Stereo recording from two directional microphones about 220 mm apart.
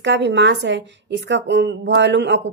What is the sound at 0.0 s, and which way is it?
A woman's voice, 55° right (ahead or behind).